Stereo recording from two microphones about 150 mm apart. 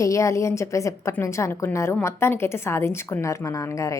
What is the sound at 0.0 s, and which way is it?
A woman's voice, 20° left (ahead or behind).